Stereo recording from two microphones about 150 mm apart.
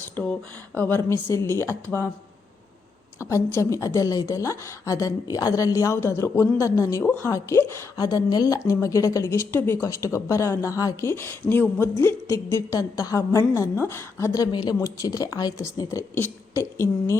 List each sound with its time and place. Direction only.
0.2 s a woman's voice: 10° left (ahead or behind)
3.2 s a woman's voice: 20° left (ahead or behind)